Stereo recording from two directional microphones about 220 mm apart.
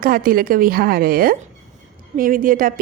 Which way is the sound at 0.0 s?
40° right (ahead or behind).